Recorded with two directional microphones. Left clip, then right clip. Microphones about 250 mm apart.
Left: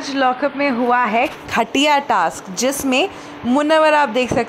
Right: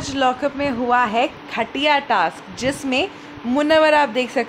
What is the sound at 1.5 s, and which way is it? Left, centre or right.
A woman's voice, left.